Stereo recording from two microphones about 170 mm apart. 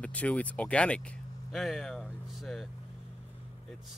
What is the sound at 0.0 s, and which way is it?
Speech, 5° left (ahead or behind).